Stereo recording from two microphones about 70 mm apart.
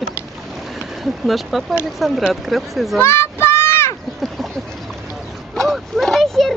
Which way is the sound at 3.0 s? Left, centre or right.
Left.